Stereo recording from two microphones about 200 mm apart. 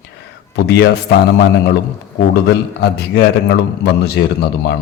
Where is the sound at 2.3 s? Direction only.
55° left (ahead or behind).